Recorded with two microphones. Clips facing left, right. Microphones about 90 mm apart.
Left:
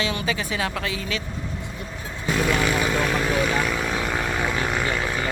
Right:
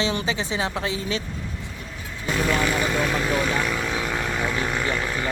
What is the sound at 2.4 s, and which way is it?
Vehicle, 5° left (ahead or behind).